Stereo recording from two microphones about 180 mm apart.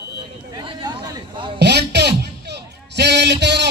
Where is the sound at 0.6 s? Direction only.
25° right (ahead or behind).